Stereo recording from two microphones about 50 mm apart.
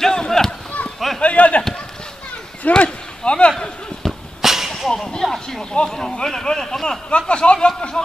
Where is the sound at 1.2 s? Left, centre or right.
Left.